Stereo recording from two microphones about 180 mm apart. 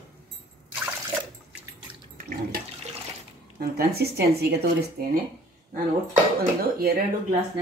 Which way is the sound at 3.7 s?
60° right (ahead or behind).